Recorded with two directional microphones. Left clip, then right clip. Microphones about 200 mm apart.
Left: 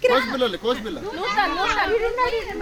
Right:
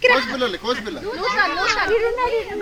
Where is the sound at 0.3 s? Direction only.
90° left.